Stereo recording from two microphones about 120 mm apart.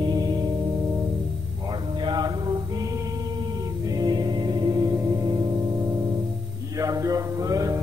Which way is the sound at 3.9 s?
35° right (ahead or behind).